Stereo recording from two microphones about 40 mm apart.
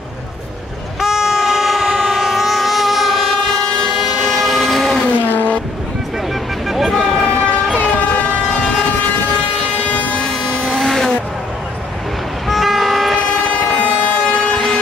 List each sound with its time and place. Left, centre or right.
1.0 s train: centre
5.3 s vehicle: left
6.7 s vehicle: centre
7.2 s vehicle: centre
8.5 s train: centre
12.4 s toot: centre
13.2 s train: centre
13.6 s vehicle: centre